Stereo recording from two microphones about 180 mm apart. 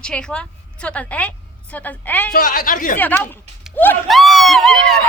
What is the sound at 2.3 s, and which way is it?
Speech, 50° left (ahead or behind).